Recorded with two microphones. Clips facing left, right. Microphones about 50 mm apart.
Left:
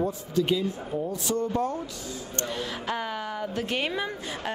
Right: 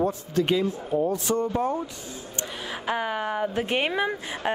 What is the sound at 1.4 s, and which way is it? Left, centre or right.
A man's voice, centre.